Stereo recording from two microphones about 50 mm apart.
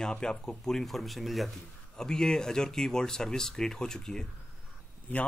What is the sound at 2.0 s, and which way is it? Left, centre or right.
Speech, centre.